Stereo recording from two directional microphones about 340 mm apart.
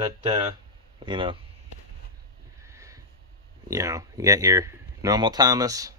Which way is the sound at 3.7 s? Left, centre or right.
Centre.